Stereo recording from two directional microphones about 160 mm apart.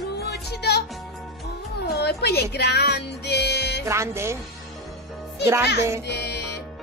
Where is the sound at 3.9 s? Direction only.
15° right (ahead or behind).